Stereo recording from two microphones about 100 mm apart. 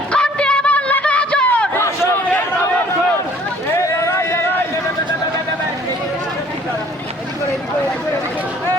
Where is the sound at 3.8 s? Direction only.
30° left (ahead or behind).